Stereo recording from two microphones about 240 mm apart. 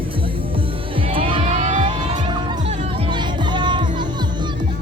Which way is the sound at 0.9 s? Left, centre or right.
Right.